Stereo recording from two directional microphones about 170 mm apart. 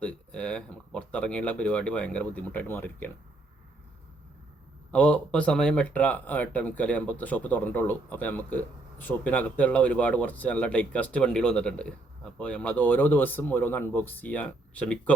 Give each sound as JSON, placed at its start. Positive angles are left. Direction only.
{"t": 0.0, "sound": "speech", "side_deg": 5}
{"t": 4.9, "sound": "speech", "side_deg": 5}